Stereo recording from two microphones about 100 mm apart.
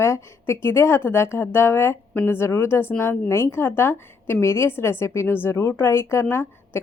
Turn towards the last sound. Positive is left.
turn(degrees=25)  # may be behind; listen again after turning